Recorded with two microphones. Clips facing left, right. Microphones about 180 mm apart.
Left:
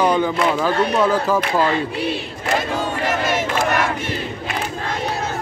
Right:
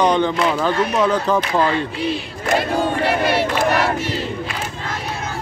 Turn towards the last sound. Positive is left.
turn(degrees=45)  # may be behind; listen again after turning